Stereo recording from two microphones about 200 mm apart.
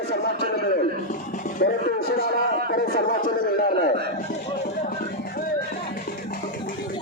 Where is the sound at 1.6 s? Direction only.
50° left (ahead or behind).